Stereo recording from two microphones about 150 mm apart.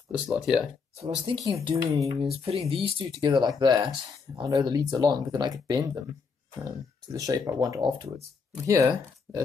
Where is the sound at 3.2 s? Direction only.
30° right (ahead or behind).